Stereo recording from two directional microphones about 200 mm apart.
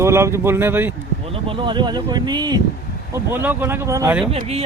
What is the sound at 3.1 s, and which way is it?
Speech, 10° right (ahead or behind).